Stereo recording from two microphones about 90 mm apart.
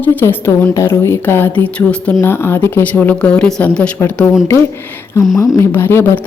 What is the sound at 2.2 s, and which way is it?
Speech, 25° left (ahead or behind).